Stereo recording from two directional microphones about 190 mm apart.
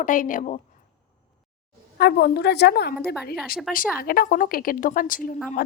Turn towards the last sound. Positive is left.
turn(degrees=50)  # may be behind; listen again after turning